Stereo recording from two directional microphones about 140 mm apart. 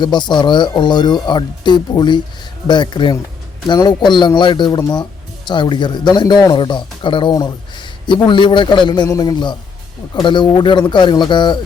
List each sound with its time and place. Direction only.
0.0 s speech: 30° left (ahead or behind)